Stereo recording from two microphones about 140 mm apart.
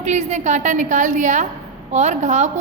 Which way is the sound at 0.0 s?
55° right (ahead or behind).